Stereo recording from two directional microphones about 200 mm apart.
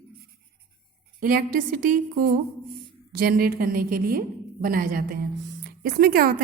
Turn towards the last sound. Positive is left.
turn(degrees=-45)  # may be behind; listen again after turning